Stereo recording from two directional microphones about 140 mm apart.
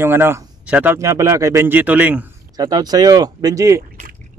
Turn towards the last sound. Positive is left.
turn(degrees=-25)  # may be behind; listen again after turning